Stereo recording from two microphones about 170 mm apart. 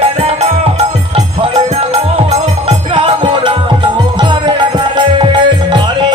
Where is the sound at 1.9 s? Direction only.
35° right (ahead or behind).